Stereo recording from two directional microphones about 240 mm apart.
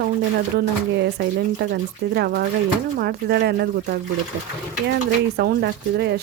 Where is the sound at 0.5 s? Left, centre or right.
Right.